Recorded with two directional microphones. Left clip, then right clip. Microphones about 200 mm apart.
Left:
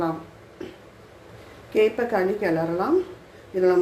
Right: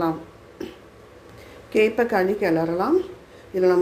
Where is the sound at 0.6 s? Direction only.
25° right (ahead or behind).